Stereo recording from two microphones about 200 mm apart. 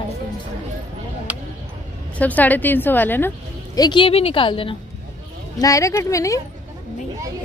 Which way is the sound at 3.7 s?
20° left (ahead or behind).